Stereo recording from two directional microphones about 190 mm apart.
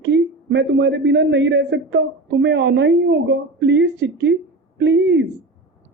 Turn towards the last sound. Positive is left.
turn(degrees=-65)  # may be behind; listen again after turning